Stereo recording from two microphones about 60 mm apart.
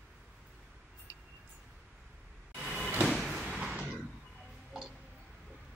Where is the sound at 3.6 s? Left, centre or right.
Centre.